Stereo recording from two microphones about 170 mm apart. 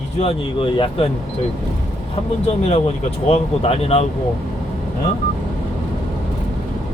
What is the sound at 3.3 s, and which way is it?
Speech, 35° left (ahead or behind).